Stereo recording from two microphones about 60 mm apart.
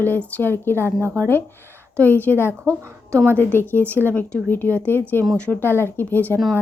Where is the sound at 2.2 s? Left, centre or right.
Left.